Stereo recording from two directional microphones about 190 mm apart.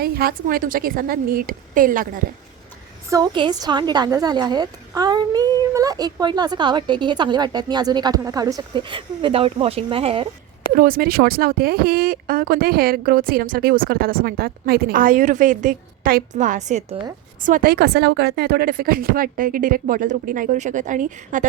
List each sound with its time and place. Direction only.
0.0 s speech: 55° right (ahead or behind)
3.1 s a woman's voice: 20° right (ahead or behind)
10.8 s speech: 50° right (ahead or behind)